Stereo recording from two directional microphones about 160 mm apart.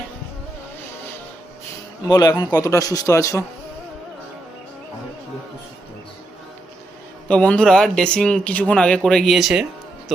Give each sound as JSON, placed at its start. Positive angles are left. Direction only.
{"t": 2.0, "sound": "speech", "side_deg": 25}
{"t": 7.3, "sound": "speech", "side_deg": 5}